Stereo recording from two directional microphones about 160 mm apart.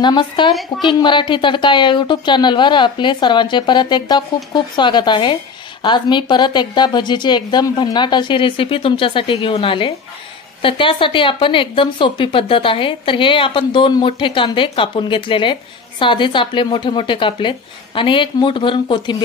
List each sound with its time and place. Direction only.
0.0 s a woman's voice: 30° left (ahead or behind)